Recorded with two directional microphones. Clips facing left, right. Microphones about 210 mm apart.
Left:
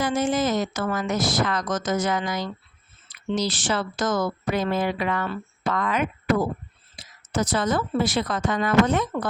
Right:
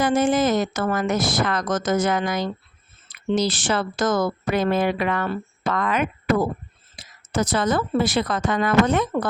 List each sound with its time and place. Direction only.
0.0 s a woman's voice: 55° right (ahead or behind)